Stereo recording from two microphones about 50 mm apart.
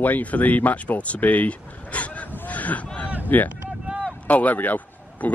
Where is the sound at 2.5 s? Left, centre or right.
Left.